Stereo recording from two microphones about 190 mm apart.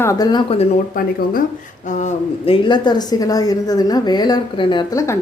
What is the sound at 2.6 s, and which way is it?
A woman's voice, 25° left (ahead or behind).